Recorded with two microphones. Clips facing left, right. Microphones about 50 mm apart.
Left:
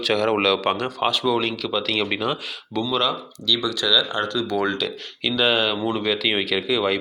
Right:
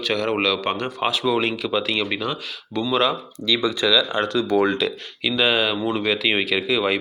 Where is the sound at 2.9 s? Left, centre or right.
Right.